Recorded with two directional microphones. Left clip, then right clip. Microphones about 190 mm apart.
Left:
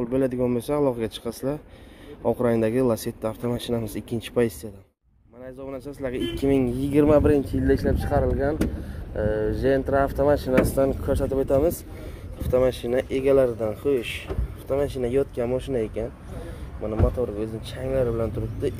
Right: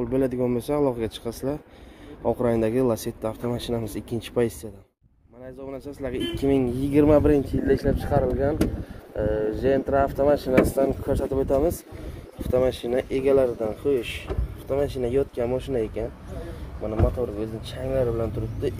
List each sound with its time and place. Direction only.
0.0 s speech: centre (ahead or behind)
5.7 s speech: 5° left (ahead or behind)